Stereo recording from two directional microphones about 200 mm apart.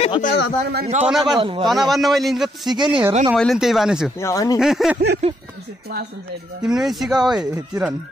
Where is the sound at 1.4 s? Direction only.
25° right (ahead or behind).